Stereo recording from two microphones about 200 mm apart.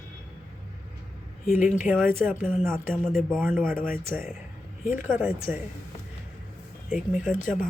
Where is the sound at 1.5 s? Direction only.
5° right (ahead or behind).